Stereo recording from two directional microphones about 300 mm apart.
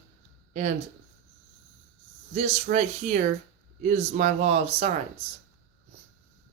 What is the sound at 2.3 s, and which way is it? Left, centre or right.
Speech, right.